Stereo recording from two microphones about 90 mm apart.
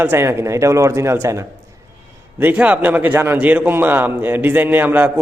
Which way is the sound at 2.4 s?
20° right (ahead or behind).